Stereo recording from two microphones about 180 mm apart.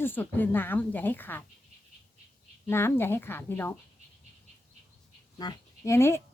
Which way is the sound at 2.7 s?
15° left (ahead or behind).